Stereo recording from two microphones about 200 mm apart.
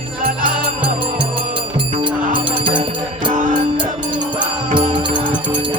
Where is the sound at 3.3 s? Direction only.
40° right (ahead or behind).